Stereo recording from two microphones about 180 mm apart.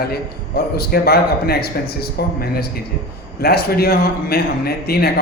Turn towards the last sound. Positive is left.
turn(degrees=60)  # may be behind; listen again after turning